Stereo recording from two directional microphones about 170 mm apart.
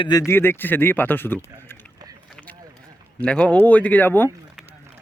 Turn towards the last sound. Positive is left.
turn(degrees=10)  # may be behind; listen again after turning